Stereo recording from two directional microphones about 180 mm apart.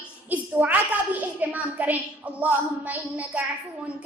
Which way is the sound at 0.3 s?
10° right (ahead or behind).